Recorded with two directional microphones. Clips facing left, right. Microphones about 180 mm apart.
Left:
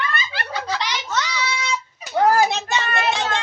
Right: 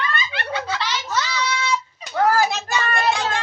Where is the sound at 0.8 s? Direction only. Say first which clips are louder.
Even; 15° left (ahead or behind).